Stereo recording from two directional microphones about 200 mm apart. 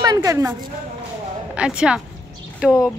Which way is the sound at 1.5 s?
5° right (ahead or behind).